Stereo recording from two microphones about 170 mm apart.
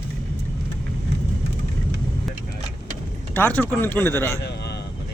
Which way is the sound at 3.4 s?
10° left (ahead or behind).